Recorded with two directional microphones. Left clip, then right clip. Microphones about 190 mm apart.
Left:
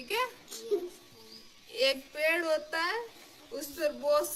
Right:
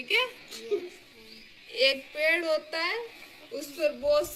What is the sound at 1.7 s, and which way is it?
A man's voice, 5° left (ahead or behind).